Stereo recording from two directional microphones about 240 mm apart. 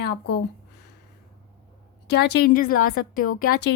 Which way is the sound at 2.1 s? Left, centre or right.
Left.